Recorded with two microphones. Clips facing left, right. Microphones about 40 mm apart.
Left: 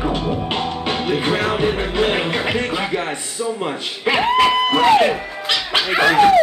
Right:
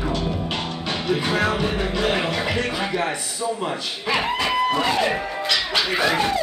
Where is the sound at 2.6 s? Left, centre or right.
Left.